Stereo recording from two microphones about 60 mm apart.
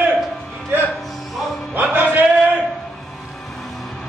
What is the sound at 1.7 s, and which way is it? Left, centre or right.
Music, right.